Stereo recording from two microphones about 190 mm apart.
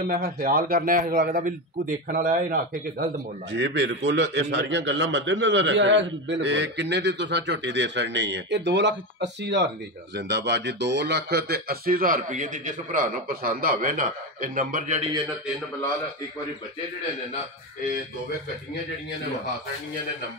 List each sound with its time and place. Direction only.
0.0 s speech: 50° right (ahead or behind)
3.5 s a man's voice: 70° right (ahead or behind); by 15.0 s 45° right (ahead or behind)